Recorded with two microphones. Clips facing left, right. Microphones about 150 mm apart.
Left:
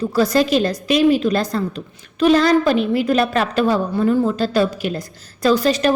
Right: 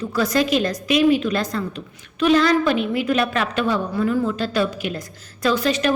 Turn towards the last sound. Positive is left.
turn(degrees=35)  # may be behind; listen again after turning